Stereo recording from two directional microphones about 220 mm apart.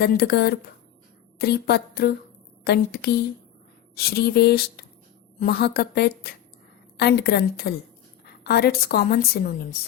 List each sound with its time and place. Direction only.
0.0 s a woman's voice: 45° left (ahead or behind)